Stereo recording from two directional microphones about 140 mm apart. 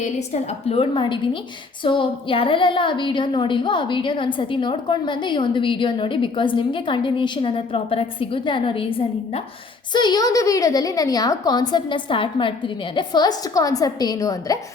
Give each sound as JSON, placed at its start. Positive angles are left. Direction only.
{"t": 0.7, "sound": "a woman's voice", "side_deg": 40}